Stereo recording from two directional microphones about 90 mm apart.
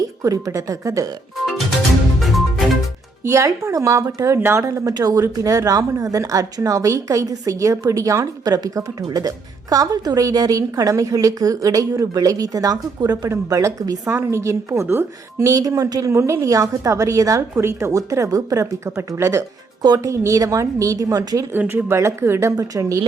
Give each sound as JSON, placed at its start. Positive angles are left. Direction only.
{"t": 0.2, "sound": "speech", "side_deg": -40}
{"t": 2.2, "sound": "music", "side_deg": 0}
{"t": 3.2, "sound": "speech", "side_deg": -35}
{"t": 4.6, "sound": "speech", "side_deg": -40}
{"t": 13.2, "sound": "speech", "side_deg": -35}
{"t": 14.1, "sound": "speech", "side_deg": -30}
{"t": 21.5, "sound": "speech", "side_deg": -20}